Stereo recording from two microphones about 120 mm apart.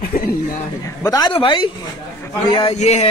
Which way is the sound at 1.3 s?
45° left (ahead or behind).